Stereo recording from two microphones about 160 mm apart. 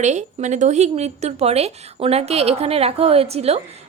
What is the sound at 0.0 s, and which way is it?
Speech, 45° right (ahead or behind).